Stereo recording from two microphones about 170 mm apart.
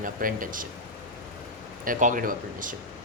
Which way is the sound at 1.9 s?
50° right (ahead or behind).